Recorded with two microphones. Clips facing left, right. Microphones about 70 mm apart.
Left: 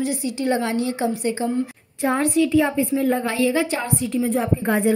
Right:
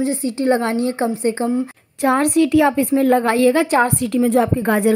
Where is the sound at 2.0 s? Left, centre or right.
Right.